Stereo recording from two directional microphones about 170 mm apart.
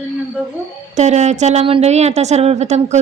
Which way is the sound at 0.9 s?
40° right (ahead or behind).